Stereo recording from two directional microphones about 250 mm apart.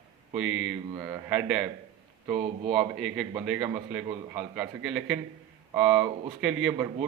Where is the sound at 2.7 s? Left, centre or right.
Centre.